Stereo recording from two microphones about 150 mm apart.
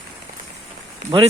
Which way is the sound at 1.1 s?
30° right (ahead or behind).